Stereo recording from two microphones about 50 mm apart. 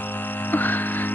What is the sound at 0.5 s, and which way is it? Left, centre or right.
Music, left.